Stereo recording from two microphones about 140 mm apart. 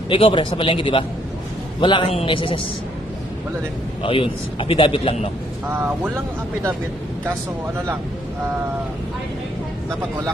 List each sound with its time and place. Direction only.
0.1 s a man's voice: 40° left (ahead or behind)
4.0 s a man's voice: 40° left (ahead or behind)